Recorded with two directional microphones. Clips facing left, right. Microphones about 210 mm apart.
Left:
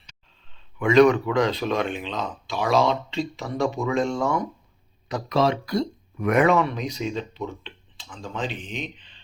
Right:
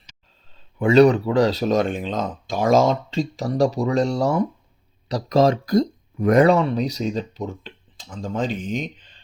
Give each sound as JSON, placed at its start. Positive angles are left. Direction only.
{"t": 0.5, "sound": "speech", "side_deg": -35}